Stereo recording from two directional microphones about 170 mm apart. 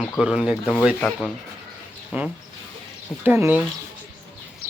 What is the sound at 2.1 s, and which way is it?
Speech, 10° right (ahead or behind).